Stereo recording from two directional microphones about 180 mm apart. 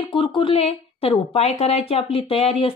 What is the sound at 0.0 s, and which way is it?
Speech, 30° left (ahead or behind).